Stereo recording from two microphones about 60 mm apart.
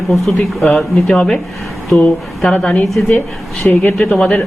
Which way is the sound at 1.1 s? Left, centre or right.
Centre.